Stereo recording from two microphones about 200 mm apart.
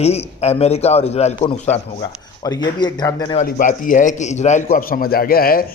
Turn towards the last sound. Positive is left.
turn(degrees=45)  # may be behind; listen again after turning